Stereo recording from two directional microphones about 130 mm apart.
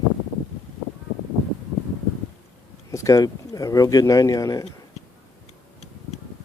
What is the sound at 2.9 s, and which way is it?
Speech, 25° left (ahead or behind).